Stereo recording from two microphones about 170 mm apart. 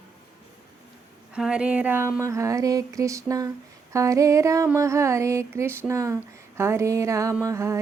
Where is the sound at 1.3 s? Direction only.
5° right (ahead or behind).